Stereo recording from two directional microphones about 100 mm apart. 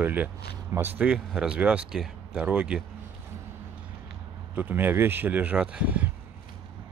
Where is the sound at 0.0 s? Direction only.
15° right (ahead or behind).